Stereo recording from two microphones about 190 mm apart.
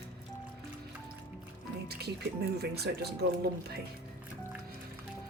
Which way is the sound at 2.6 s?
55° right (ahead or behind).